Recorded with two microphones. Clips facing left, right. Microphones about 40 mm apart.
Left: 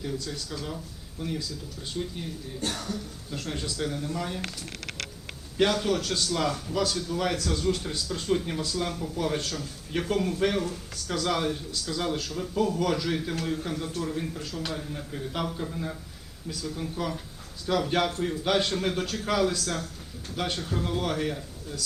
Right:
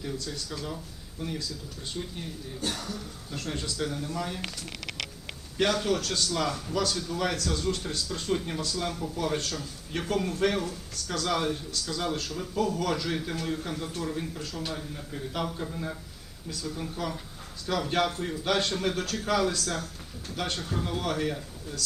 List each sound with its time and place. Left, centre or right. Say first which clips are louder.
1.2 s speech: left 2 dB; centre
5.5 s speech: left 2 dB; centre